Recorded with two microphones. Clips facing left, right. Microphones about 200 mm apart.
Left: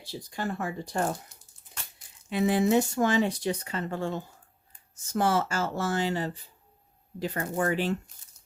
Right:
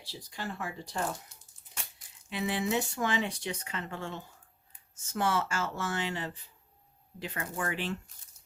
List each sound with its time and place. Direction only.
0.3 s speech: 50° left (ahead or behind)
2.3 s speech: 45° left (ahead or behind)